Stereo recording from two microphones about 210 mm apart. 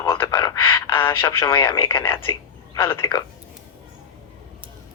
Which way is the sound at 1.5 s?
20° left (ahead or behind).